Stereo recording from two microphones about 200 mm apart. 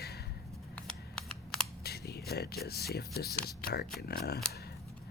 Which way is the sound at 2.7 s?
50° left (ahead or behind).